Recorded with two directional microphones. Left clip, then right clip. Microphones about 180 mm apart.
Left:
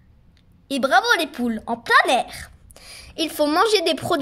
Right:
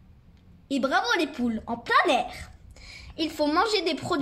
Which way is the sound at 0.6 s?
50° left (ahead or behind).